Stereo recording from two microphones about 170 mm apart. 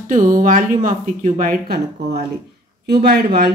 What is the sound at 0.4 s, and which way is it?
Speech, 50° right (ahead or behind).